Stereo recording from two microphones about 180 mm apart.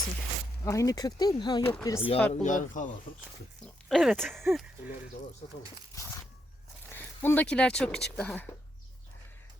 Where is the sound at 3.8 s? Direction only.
Centre (ahead or behind).